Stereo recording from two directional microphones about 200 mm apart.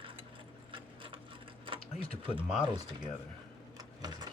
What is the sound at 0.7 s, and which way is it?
Sewing machine, 25° right (ahead or behind).